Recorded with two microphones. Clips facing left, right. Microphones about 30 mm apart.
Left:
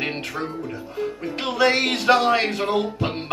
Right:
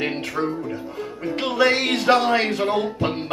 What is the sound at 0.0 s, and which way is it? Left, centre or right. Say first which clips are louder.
Music: right 3 dB; centre.